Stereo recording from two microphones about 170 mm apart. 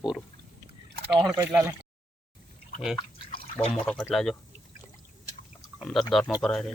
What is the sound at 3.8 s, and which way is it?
Speech, 5° left (ahead or behind).